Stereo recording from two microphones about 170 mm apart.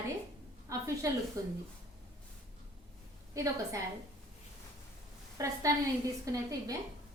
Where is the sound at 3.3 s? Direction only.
20° right (ahead or behind).